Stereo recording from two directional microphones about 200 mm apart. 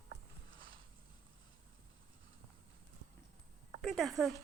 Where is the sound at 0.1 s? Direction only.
70° right (ahead or behind).